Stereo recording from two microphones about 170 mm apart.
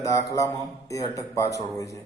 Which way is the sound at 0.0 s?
20° left (ahead or behind).